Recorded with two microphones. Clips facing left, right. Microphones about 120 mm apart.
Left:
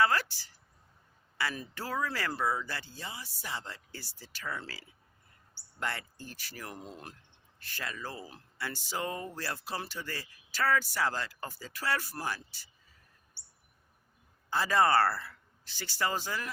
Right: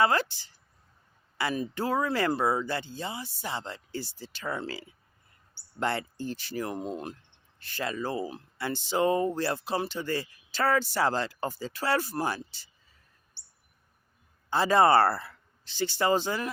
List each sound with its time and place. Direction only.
0.0 s speech: 25° right (ahead or behind)
14.5 s speech: 25° right (ahead or behind)